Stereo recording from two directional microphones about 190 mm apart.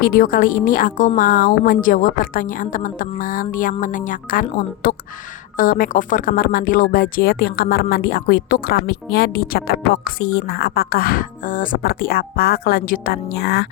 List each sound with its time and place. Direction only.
0.0 s speech: 50° left (ahead or behind)
13.3 s speech: 60° left (ahead or behind)